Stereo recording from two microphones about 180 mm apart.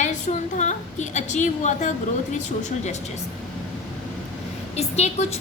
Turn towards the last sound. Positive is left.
turn(degrees=35)  # may be behind; listen again after turning